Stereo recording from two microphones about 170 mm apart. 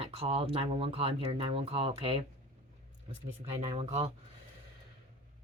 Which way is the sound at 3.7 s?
35° right (ahead or behind).